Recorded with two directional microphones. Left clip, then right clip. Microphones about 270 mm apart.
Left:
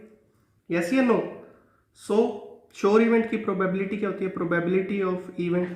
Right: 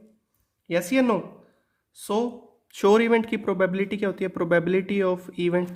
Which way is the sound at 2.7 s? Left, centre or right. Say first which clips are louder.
Right 1 dB; right.